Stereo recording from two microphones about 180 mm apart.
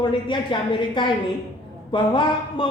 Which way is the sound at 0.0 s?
25° left (ahead or behind).